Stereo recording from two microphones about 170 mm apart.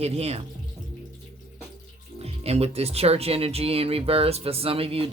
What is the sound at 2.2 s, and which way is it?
Speech, 35° right (ahead or behind).